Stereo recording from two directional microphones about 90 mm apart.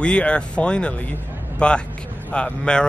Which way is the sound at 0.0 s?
10° left (ahead or behind).